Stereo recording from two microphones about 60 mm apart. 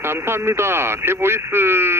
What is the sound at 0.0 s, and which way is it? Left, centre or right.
Speech, right.